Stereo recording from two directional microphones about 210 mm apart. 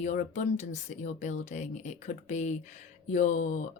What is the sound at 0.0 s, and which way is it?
Speech, 35° left (ahead or behind).